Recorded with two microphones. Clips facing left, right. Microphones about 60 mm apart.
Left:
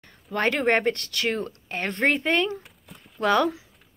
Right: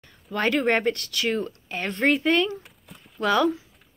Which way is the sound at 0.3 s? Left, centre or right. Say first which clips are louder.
Even; left.